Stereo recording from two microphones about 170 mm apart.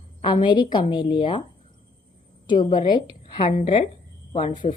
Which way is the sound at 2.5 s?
25° left (ahead or behind).